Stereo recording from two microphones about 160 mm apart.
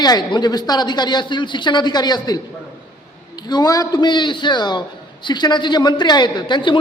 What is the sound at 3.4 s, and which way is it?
A man's voice, 25° left (ahead or behind).